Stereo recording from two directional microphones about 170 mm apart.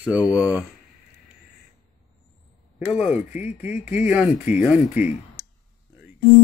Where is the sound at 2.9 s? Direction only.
10° right (ahead or behind).